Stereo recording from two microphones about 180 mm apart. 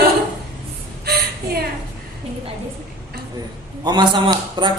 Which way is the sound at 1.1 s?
60° right (ahead or behind).